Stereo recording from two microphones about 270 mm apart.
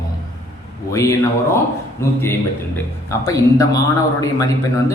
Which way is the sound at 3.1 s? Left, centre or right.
Centre.